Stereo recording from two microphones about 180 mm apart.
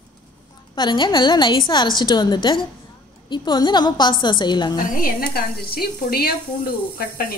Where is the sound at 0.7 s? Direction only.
25° left (ahead or behind).